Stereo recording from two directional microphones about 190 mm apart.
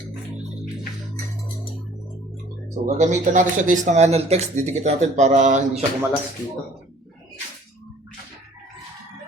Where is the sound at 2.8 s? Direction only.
40° right (ahead or behind).